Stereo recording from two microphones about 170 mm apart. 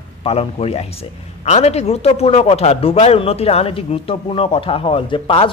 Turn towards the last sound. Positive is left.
turn(degrees=30)  # may be behind; listen again after turning